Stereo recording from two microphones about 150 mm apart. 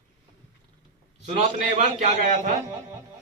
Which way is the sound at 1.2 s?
55° right (ahead or behind).